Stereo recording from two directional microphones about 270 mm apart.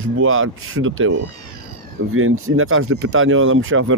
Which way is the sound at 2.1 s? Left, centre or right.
Right.